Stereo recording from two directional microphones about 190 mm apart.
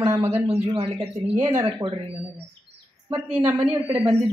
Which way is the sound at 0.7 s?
30° right (ahead or behind).